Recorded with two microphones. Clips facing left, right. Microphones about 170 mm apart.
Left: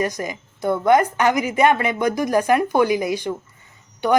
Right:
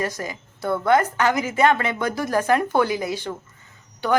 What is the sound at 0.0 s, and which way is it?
A woman's voice, 15° left (ahead or behind).